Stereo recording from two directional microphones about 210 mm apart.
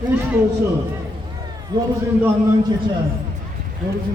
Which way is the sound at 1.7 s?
20° right (ahead or behind).